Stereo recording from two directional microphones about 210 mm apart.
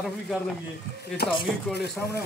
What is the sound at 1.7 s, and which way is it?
Speech, 50° left (ahead or behind).